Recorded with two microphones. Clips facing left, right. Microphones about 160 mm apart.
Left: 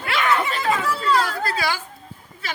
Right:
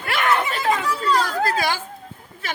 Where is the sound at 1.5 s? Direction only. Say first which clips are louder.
Right 2 dB; 45° right (ahead or behind).